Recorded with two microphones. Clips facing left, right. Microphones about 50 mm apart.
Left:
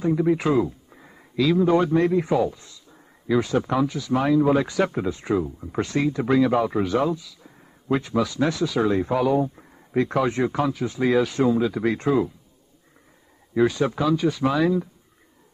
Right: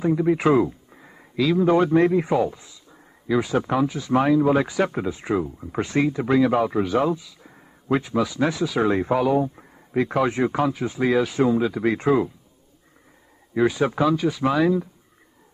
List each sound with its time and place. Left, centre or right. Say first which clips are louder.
0.0 s speech: even; centre
0.4 s speech: right 3 dB; right
0.9 s a man's voice: left 2 dB; centre
2.6 s a sound: even; centre
4.0 s speech: right 2 dB; centre
6.2 s speech: left 1 dB; centre
11.0 s speech: even; centre
13.6 s speech: even; centre
14.0 s speech: even; centre